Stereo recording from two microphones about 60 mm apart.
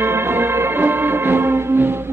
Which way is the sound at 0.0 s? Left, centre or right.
Right.